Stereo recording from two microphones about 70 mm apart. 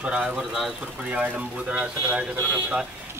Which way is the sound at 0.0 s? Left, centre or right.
Centre.